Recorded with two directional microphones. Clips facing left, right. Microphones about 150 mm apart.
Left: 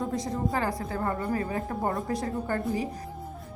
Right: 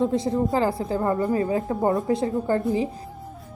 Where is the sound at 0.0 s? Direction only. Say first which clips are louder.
Right 7 dB; 25° right (ahead or behind).